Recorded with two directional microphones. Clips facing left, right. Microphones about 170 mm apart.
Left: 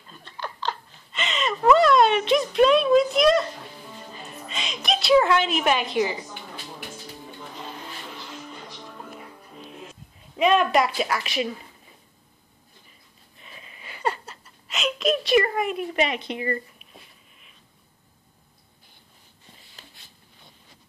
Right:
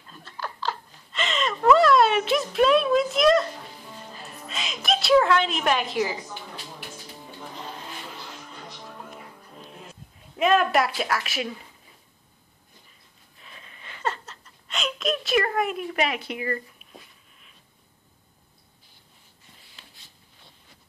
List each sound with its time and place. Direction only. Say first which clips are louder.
0.2 s giggle: even; 5° right (ahead or behind)
4.1 s music: left 1 dB; centre (ahead or behind)
10.3 s a woman's voice: left 1 dB; centre (ahead or behind)
13.4 s a sound: left 2 dB; 5° left (ahead or behind)
15.9 s a woman's voice: left 2 dB; 5° right (ahead or behind)